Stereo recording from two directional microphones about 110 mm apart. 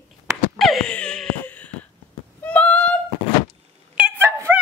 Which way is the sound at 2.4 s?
10° left (ahead or behind).